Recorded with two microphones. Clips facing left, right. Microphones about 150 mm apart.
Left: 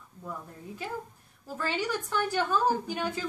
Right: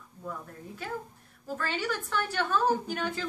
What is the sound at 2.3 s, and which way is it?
Speech, 10° left (ahead or behind).